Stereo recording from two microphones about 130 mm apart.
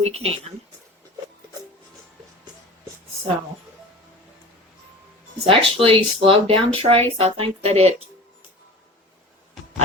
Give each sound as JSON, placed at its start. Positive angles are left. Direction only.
{"t": 0.0, "sound": "speech", "side_deg": -50}
{"t": 5.5, "sound": "speech", "side_deg": -45}